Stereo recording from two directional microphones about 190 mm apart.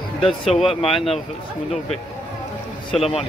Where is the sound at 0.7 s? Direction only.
30° left (ahead or behind).